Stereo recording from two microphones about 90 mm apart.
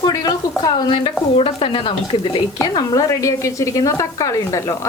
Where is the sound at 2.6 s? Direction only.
45° left (ahead or behind).